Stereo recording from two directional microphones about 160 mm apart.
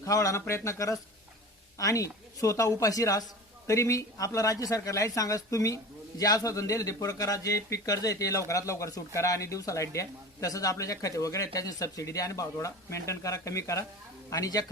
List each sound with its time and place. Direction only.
0.0 s speech: 20° left (ahead or behind)